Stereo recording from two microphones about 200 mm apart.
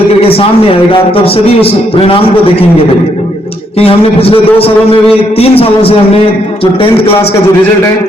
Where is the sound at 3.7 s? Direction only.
30° left (ahead or behind).